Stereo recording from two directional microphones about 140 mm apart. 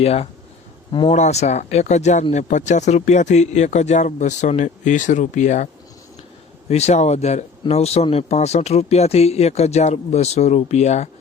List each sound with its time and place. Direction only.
0.0 s speech: 45° left (ahead or behind)
6.7 s speech: 50° left (ahead or behind)